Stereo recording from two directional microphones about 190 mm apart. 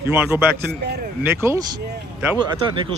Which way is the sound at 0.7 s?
60° right (ahead or behind).